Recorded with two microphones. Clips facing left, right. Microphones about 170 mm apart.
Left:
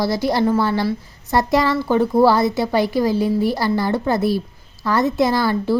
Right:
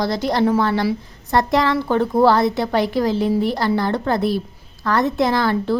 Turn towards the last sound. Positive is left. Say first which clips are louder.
# even
turn(degrees=5)  # may be behind; listen again after turning